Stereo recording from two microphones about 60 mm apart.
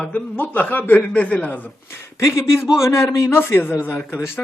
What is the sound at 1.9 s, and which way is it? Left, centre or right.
Speech, left.